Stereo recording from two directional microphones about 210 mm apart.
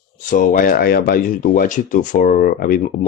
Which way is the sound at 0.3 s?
40° left (ahead or behind).